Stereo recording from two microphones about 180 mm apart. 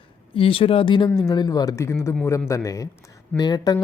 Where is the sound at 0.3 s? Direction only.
30° left (ahead or behind).